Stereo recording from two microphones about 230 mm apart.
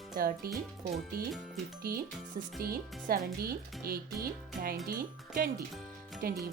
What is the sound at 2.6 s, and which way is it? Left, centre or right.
Speech, right.